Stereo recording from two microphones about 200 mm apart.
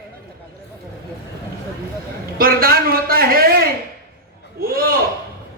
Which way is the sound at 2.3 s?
45° right (ahead or behind).